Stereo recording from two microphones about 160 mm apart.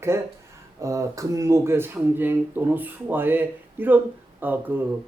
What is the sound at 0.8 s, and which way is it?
Speech, 20° right (ahead or behind).